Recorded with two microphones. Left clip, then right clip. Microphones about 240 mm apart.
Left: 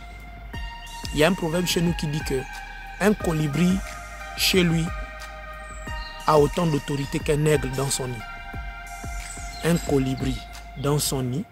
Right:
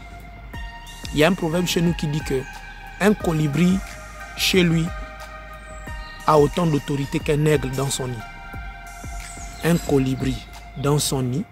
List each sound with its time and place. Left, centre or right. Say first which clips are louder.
1.1 s speech: right 2 dB; centre
6.2 s speech: right 2 dB; centre
9.6 s speech: right 3 dB; centre